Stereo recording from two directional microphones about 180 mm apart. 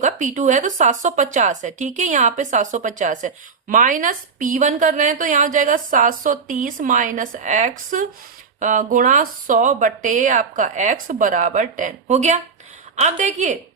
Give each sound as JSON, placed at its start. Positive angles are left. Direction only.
{"t": 0.0, "sound": "speech", "side_deg": -45}